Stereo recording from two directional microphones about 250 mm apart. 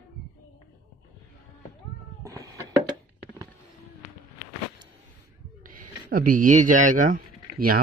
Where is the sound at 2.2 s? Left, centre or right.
Centre.